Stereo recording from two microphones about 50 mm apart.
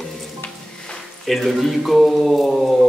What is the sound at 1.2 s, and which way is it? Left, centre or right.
A man's voice, centre.